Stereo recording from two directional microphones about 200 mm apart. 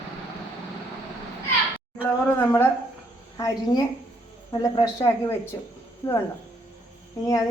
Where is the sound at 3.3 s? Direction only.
20° left (ahead or behind).